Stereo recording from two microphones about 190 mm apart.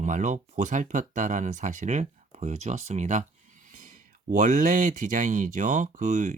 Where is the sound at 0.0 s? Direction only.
40° right (ahead or behind).